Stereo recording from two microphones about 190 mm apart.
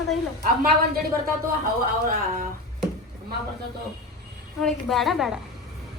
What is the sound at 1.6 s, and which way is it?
Speech, 45° right (ahead or behind).